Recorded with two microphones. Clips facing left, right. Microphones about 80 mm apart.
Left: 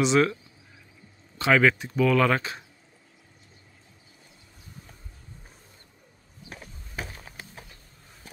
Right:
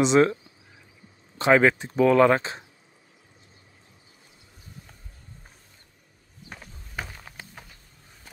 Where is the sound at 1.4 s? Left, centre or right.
Right.